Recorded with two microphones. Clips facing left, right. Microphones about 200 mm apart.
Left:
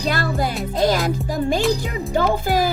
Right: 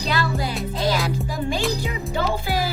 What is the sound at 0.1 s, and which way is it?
Speech, 50° left (ahead or behind).